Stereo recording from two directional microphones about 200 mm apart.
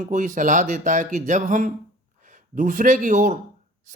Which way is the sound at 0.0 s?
40° right (ahead or behind).